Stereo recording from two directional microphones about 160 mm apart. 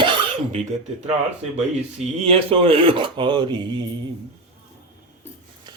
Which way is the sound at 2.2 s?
35° right (ahead or behind).